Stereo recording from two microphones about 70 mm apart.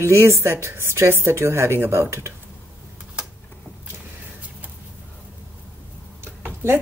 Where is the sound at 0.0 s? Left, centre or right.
Right.